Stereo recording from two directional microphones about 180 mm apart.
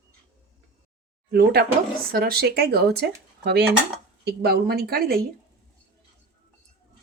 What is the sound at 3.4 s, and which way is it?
Dishes, 65° right (ahead or behind).